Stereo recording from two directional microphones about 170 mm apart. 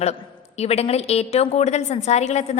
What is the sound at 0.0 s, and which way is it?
A woman's voice, 40° left (ahead or behind).